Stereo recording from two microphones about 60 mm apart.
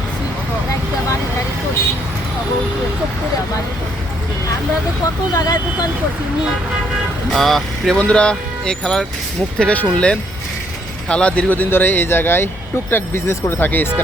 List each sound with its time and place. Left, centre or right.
5.3 s speech: left
7.3 s speech: centre
7.9 s speech: centre
11.4 s speech: left